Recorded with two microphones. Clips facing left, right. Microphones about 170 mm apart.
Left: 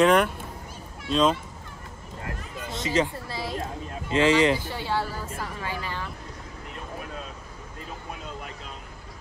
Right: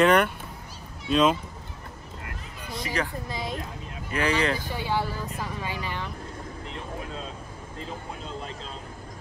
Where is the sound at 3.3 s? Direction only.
20° right (ahead or behind).